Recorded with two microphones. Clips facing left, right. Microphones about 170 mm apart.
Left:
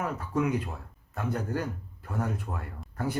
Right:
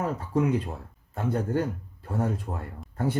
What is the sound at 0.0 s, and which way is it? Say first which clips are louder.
Speech: right 3 dB; 30° right (ahead or behind).